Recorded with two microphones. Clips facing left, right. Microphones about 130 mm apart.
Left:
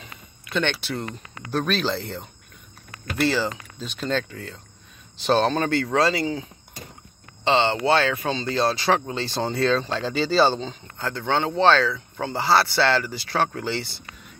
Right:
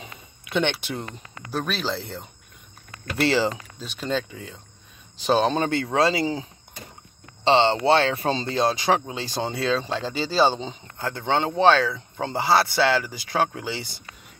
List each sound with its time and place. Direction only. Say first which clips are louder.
0.0 s a sound: right 2 dB; 20° right (ahead or behind)
1.5 s speech: left 3 dB; 5° right (ahead or behind)
3.2 s speech: right 1 dB; 80° right
3.8 s speech: left 1 dB; 5° right (ahead or behind)
5.5 s speech: left 1 dB; 20° right (ahead or behind)
7.4 s speech: right 2 dB; 25° right (ahead or behind)
8.5 s speech: left 1 dB; 20° right (ahead or behind)